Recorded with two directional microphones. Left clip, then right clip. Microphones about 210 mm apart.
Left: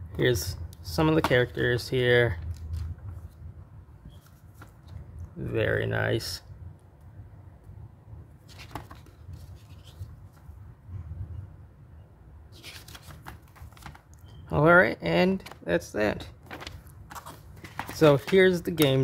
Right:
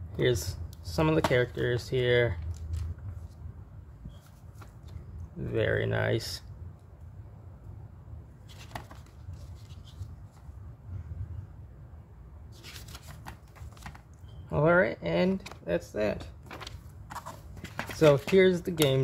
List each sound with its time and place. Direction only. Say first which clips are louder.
0.1 s speech: left 2 dB; 10° left (ahead or behind)
5.4 s speech: left 2 dB; 5° left (ahead or behind)
14.5 s speech: left 5 dB; 20° left (ahead or behind)
17.9 s speech: left 2 dB; 10° left (ahead or behind)